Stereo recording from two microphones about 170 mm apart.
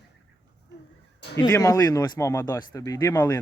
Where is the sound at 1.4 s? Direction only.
20° left (ahead or behind).